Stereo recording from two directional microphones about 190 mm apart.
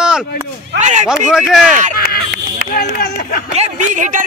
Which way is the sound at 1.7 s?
40° right (ahead or behind).